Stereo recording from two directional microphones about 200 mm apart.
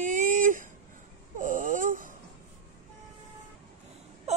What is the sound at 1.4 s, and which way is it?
Speech, 40° right (ahead or behind).